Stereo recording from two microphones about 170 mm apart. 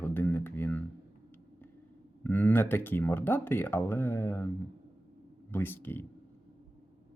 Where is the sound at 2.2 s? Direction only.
10° left (ahead or behind).